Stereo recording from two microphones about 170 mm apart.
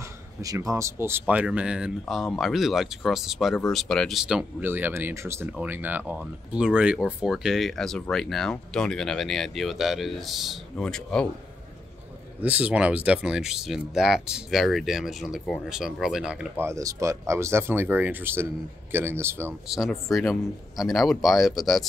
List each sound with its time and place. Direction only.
0.4 s speech: 20° right (ahead or behind); by 11.2 s 5° left (ahead or behind)
12.4 s speech: 10° right (ahead or behind)
19.7 s speech: centre (ahead or behind)